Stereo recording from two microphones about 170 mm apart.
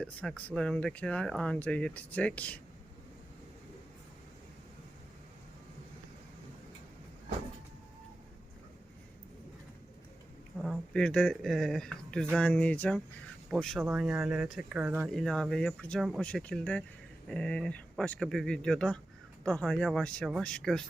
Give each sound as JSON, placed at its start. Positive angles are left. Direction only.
{"t": 0.0, "sound": "speech", "side_deg": 5}
{"t": 10.6, "sound": "speech", "side_deg": 5}